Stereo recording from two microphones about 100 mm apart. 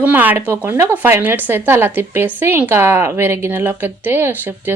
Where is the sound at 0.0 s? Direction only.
15° right (ahead or behind).